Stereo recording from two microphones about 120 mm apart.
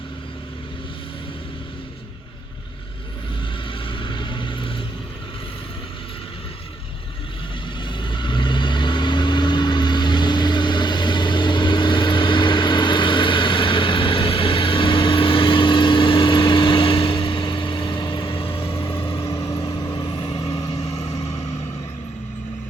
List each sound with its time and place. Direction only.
3.8 s vehicle: 45° left (ahead or behind)
7.9 s vehicle: 40° left (ahead or behind)
19.3 s vehicle: 25° left (ahead or behind)